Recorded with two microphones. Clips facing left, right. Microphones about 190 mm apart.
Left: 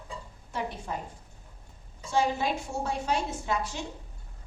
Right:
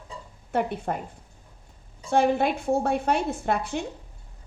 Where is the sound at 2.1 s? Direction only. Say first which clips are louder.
Right 6 dB; 55° right (ahead or behind).